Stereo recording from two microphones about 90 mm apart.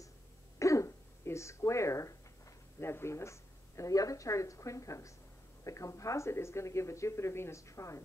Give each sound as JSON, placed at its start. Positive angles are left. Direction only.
{"t": 0.6, "sound": "throat clearing", "side_deg": 35}
{"t": 2.8, "sound": "speech", "side_deg": 30}